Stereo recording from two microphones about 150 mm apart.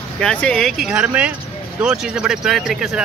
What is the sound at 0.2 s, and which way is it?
Speech, 5° left (ahead or behind).